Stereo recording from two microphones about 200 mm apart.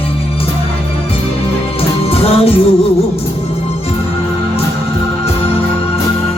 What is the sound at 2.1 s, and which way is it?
Music, 30° left (ahead or behind).